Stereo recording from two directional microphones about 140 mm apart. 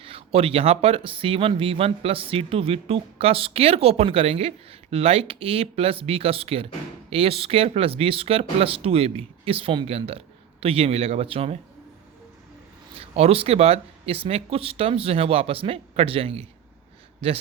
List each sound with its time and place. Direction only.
0.0 s speech: 40° right (ahead or behind)
13.0 s speech: 45° right (ahead or behind)